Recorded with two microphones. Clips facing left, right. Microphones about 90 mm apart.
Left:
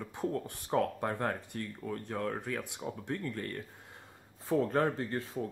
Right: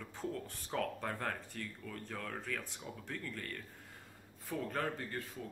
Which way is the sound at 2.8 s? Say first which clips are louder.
Left 8 dB; 35° left (ahead or behind).